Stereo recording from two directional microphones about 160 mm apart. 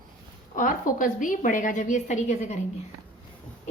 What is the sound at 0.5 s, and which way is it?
A woman's voice, 55° left (ahead or behind).